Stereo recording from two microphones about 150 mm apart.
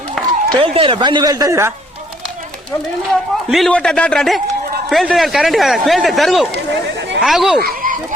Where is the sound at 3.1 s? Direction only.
Centre (ahead or behind).